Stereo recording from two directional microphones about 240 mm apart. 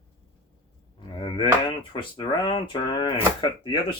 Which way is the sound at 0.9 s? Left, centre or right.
Centre.